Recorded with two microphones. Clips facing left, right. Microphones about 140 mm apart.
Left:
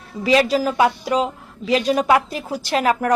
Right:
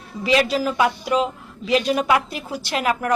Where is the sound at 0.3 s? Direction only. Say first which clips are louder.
Left 2 dB; 40° left (ahead or behind).